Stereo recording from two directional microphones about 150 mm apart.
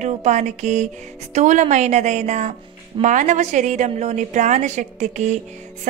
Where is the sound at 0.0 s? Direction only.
50° right (ahead or behind).